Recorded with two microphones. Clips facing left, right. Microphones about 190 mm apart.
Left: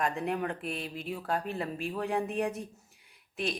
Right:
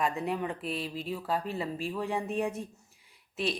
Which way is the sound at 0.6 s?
30° right (ahead or behind).